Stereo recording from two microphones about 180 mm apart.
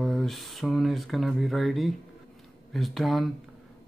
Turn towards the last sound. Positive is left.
turn(degrees=0)  # may be behind; listen again after turning